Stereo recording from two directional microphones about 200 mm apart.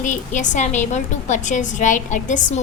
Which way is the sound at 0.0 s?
40° left (ahead or behind).